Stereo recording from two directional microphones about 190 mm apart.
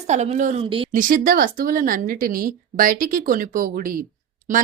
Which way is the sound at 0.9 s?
45° right (ahead or behind).